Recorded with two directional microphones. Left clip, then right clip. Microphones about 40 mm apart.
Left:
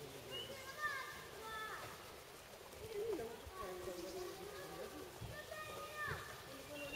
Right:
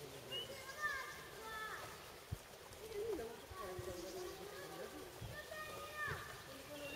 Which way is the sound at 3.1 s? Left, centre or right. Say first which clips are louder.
Left 1 dB; centre.